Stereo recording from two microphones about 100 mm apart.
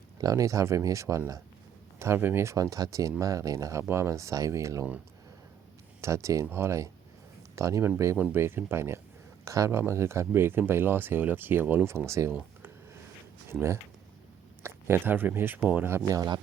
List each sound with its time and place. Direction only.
0.2 s speech: 35° right (ahead or behind)
6.0 s speech: 30° right (ahead or behind)
13.5 s speech: 25° right (ahead or behind)
15.9 s speech: 25° right (ahead or behind)
16.1 s a man's voice: 45° right (ahead or behind)